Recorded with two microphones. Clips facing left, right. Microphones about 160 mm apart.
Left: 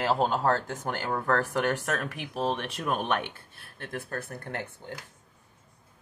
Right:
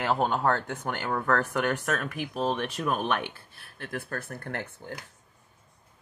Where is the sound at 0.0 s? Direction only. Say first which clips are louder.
Even; 30° left (ahead or behind).